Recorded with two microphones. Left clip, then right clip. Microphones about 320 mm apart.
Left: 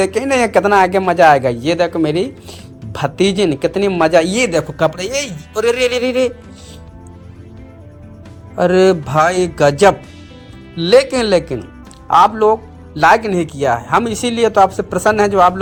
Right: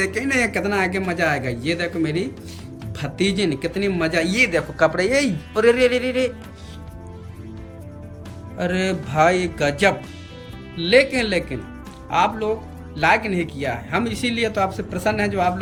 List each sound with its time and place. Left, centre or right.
0.0 s speech: centre
4.8 s speech: left
8.5 s speech: centre